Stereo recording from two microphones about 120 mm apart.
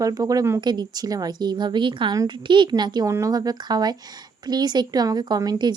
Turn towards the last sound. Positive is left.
turn(degrees=-35)  # may be behind; listen again after turning